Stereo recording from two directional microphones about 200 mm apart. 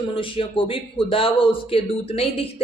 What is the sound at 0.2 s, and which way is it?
A woman's voice, 25° left (ahead or behind).